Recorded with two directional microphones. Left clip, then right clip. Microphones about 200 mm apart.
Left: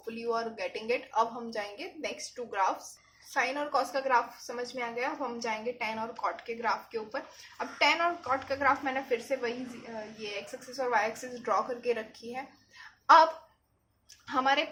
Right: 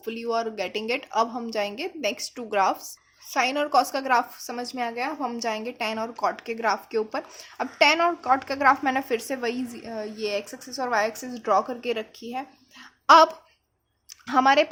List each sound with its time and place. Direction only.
0.0 s a woman's voice: 45° right (ahead or behind)
10.8 s a woman's voice: 45° right (ahead or behind)
14.3 s a woman's voice: 55° right (ahead or behind)